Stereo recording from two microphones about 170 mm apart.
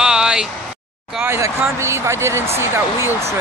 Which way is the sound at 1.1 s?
15° right (ahead or behind).